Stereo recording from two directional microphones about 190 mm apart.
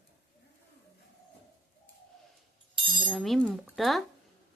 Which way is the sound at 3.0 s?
Centre (ahead or behind).